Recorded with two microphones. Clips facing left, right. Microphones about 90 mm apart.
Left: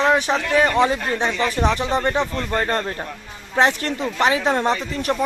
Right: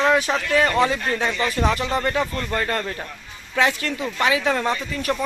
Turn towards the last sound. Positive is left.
turn(degrees=30)  # may be behind; listen again after turning